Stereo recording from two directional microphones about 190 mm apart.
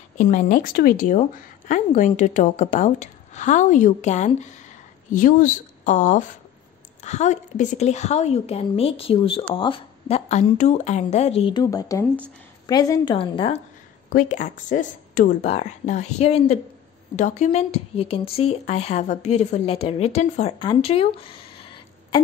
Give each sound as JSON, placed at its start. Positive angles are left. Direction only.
{"t": 0.2, "sound": "a woman's voice", "side_deg": 40}
{"t": 14.1, "sound": "speech", "side_deg": 40}